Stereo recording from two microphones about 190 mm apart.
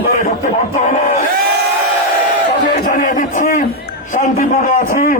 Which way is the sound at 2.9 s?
45° left (ahead or behind).